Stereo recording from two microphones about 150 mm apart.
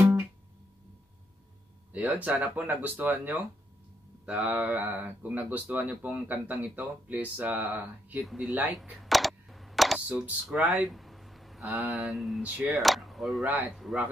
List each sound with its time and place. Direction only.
1.9 s speech: 10° right (ahead or behind)
9.0 s speech: centre (ahead or behind)